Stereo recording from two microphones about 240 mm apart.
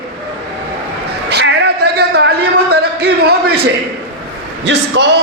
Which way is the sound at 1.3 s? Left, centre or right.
Right.